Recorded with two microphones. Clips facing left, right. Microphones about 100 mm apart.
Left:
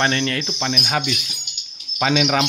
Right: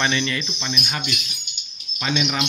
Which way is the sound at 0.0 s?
50° left (ahead or behind).